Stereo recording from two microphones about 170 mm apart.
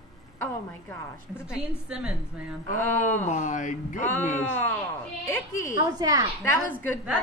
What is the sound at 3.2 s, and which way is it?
Speech, 45° left (ahead or behind).